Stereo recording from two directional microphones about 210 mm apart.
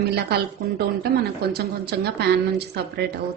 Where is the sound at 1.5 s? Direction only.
50° right (ahead or behind).